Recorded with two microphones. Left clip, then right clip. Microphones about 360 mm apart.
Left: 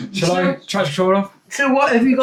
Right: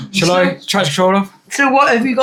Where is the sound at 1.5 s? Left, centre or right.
Right.